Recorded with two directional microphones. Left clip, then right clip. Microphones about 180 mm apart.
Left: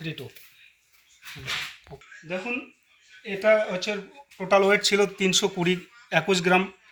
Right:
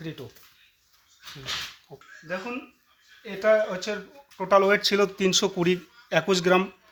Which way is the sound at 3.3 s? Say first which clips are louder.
Left 1 dB; 20° right (ahead or behind).